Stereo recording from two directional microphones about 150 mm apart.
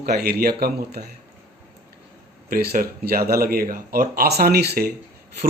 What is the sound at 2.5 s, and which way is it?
Speech, 75° right (ahead or behind).